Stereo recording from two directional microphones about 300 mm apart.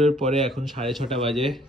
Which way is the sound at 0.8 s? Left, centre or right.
Centre.